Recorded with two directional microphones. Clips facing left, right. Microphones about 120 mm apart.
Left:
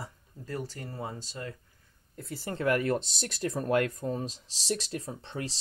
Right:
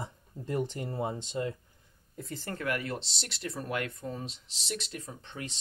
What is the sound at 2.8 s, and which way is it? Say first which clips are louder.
Speech: left 8 dB; 45° left (ahead or behind).